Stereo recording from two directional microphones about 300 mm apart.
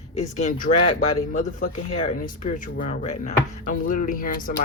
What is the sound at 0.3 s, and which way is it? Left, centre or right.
Speech, left.